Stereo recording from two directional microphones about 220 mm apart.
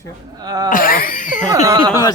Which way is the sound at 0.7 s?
40° left (ahead or behind).